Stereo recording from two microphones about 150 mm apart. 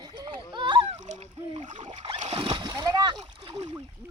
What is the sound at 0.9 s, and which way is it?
Boat, 50° right (ahead or behind).